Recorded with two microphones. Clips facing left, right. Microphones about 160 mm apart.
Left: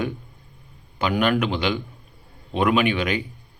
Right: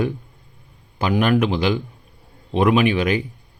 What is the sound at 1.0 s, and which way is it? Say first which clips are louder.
Speech: right 3 dB; 40° right (ahead or behind).